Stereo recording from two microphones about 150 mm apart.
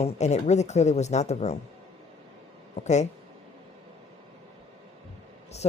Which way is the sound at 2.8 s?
50° left (ahead or behind).